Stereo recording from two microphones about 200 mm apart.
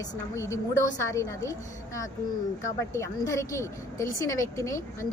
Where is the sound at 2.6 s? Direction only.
15° left (ahead or behind).